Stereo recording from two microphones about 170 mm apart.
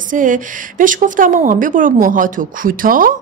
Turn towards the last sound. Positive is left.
turn(degrees=-55)  # may be behind; listen again after turning